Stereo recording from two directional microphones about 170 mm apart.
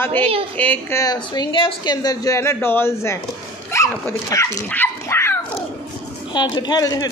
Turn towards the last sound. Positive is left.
turn(degrees=20)  # may be behind; listen again after turning